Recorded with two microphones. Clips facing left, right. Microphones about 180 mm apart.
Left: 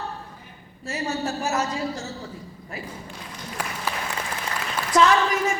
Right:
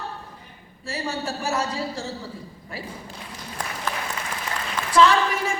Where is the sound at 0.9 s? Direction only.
30° right (ahead or behind).